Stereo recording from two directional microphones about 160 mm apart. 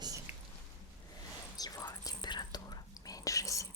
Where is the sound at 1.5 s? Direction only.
25° left (ahead or behind).